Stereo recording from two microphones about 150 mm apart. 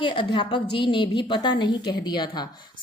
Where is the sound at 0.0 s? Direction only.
30° left (ahead or behind).